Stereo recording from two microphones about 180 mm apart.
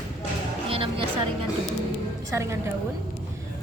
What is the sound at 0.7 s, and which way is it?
Music, 30° right (ahead or behind).